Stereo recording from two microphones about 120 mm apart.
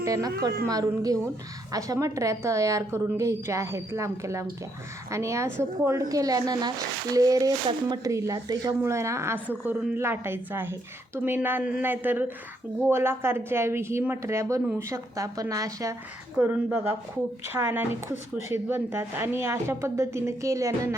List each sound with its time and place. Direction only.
0.0 s speech: 30° right (ahead or behind)
16.4 s speech: 15° right (ahead or behind)